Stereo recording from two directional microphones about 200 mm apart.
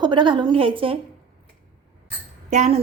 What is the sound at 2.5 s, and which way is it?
Speech, 35° right (ahead or behind).